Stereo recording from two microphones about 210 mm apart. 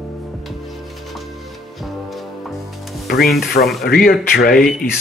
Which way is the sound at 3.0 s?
45° left (ahead or behind).